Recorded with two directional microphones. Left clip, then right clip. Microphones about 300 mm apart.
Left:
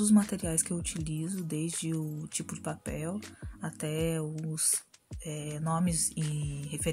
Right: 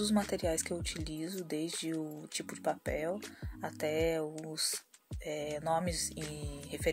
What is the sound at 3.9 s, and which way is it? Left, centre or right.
Speech, left.